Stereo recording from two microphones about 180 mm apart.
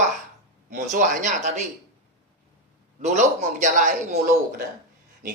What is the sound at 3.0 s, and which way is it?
Speech, 40° right (ahead or behind).